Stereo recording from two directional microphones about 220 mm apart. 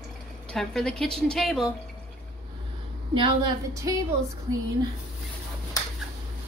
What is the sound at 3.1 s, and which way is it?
Speech, 20° right (ahead or behind).